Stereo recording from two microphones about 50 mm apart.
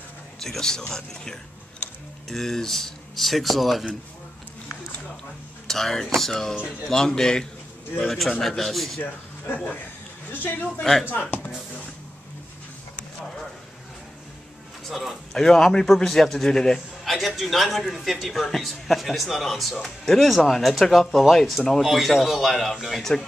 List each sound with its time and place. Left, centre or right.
0.4 s a man's voice: centre
5.7 s a man's voice: centre
9.0 s a man's voice: left
10.8 s speech: centre
11.1 s a man's voice: left
11.3 s a sound: left
14.9 s a man's voice: centre